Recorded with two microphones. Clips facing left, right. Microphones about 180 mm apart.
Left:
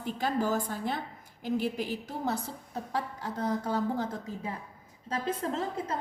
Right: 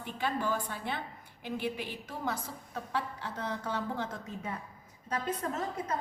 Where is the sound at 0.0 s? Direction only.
40° left (ahead or behind).